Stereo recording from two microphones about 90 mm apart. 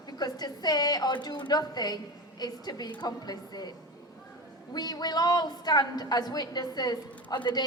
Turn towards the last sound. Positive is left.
turn(degrees=55)  # may be behind; listen again after turning